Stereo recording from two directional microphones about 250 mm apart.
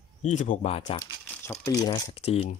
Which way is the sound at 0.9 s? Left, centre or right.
Centre.